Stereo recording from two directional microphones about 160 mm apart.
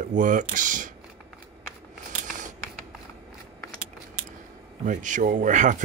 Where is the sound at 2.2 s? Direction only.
50° right (ahead or behind).